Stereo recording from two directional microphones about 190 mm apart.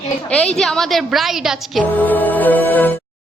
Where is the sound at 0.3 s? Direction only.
5° left (ahead or behind).